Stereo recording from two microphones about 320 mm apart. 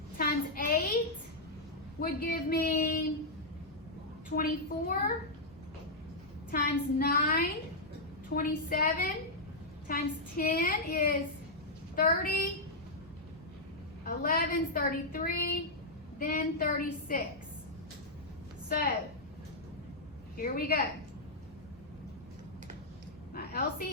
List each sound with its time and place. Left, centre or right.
0.2 s child singing: left
2.0 s a woman's voice: left
4.4 s a woman's voice: left
6.5 s a woman's voice: left
14.0 s a woman's voice: left
18.7 s a woman's voice: left
20.3 s a woman's voice: left
23.3 s a sound: left